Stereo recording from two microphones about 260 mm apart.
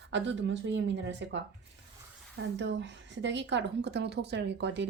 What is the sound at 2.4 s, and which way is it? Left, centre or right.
A woman's voice, right.